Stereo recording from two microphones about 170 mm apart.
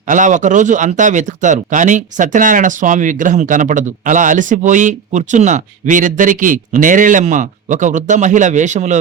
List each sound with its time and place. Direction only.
0.1 s speech: 45° right (ahead or behind)